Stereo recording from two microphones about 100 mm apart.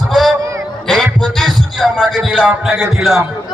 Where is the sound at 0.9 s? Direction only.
5° left (ahead or behind).